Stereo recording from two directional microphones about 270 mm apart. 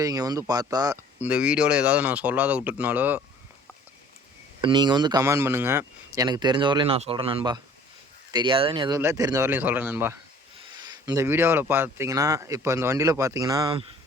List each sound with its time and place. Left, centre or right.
0.0 s speech: centre
4.6 s speech: centre